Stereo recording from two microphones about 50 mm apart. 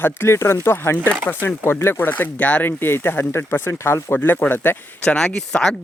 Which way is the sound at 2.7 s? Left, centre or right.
Left.